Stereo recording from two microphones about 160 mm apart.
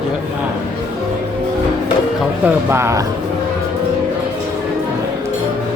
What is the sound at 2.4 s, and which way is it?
Speech, 15° right (ahead or behind).